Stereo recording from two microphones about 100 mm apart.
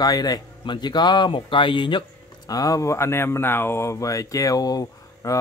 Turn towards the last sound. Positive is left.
turn(degrees=35)  # may be behind; listen again after turning